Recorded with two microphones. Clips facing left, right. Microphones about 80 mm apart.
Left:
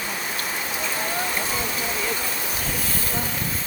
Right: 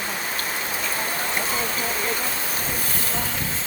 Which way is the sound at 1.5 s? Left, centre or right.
Right.